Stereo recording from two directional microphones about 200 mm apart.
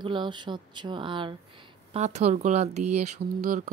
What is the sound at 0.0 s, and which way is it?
Speech, 25° right (ahead or behind).